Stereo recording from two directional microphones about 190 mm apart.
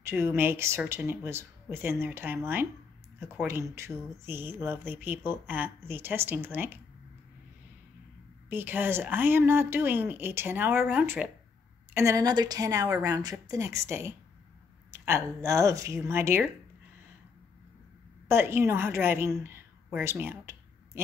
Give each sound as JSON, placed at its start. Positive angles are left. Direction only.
{"t": 0.0, "sound": "speech", "side_deg": -10}
{"t": 8.5, "sound": "speech", "side_deg": -10}
{"t": 18.3, "sound": "a woman's voice", "side_deg": -10}